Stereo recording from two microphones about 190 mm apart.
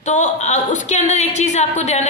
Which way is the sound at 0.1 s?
40° left (ahead or behind).